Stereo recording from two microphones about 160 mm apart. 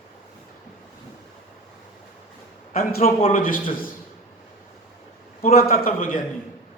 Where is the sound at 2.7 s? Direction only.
60° left (ahead or behind).